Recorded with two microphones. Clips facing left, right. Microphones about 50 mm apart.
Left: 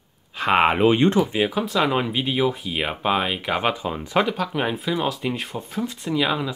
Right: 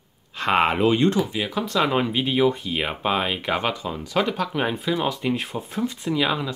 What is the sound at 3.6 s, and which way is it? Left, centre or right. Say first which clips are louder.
Speech: left 2 dB; centre.